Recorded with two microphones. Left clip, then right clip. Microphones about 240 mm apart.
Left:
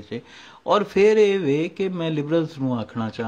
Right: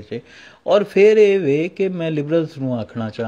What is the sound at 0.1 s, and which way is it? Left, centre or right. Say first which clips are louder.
Speech: right 4 dB; centre.